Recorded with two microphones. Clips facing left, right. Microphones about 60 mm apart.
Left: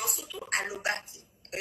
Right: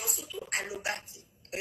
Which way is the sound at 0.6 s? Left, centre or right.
Centre.